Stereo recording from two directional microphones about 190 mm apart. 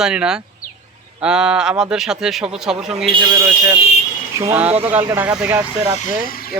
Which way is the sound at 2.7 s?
35° right (ahead or behind).